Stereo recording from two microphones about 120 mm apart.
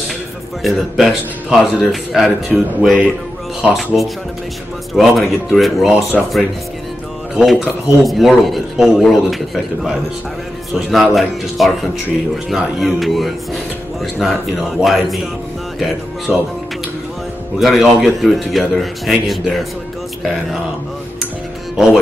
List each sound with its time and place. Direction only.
0.6 s a man's voice: centre (ahead or behind)
7.3 s a man's voice: centre (ahead or behind)
10.7 s a man's voice: centre (ahead or behind)
16.3 s a man's voice: 5° right (ahead or behind)
17.6 s a man's voice: centre (ahead or behind)